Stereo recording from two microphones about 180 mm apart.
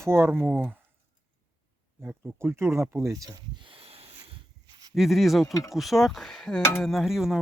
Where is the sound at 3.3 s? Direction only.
25° right (ahead or behind).